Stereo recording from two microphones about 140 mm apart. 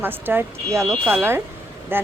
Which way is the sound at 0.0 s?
15° right (ahead or behind).